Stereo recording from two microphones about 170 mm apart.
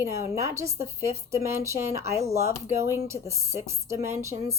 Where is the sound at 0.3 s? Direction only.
15° right (ahead or behind).